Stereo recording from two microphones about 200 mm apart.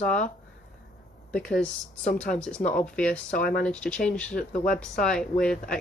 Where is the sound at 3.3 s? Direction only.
50° left (ahead or behind).